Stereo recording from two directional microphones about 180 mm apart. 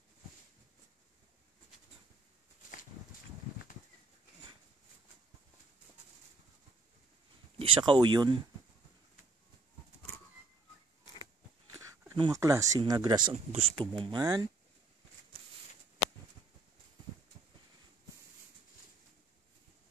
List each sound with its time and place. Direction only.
7.5 s speech: 30° right (ahead or behind)
11.7 s a sound: 15° right (ahead or behind)
12.2 s speech: 15° right (ahead or behind)